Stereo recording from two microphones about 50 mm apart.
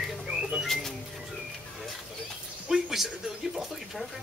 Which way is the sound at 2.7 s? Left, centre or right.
Centre.